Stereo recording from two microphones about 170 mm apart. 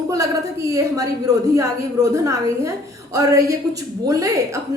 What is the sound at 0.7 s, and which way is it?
A woman's voice, 20° right (ahead or behind).